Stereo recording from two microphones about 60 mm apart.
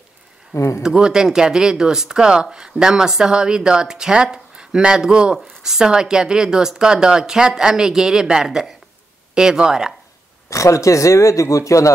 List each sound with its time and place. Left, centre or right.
0.6 s speech: left
0.8 s speech: centre
10.5 s speech: left